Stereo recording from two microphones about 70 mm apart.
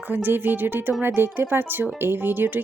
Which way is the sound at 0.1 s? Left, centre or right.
Right.